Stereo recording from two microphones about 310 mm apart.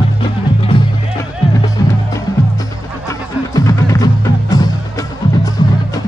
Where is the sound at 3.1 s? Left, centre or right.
Centre.